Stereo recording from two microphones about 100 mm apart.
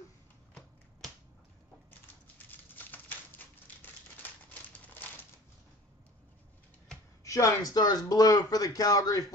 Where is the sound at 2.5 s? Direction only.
20° left (ahead or behind).